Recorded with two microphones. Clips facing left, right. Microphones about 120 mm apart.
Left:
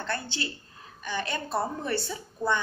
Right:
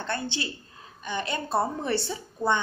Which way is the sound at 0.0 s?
20° right (ahead or behind).